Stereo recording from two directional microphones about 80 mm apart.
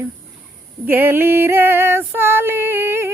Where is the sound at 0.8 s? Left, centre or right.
Right.